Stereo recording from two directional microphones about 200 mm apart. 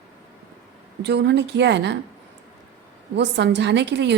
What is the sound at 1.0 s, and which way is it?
Speech, 60° right (ahead or behind).